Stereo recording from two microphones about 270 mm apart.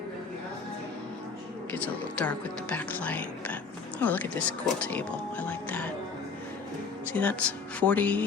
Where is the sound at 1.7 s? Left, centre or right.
Centre.